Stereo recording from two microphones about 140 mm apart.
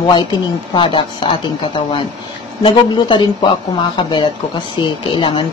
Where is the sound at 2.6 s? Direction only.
35° left (ahead or behind).